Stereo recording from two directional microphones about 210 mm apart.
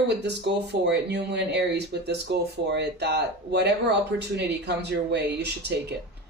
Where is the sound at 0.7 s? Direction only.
55° right (ahead or behind).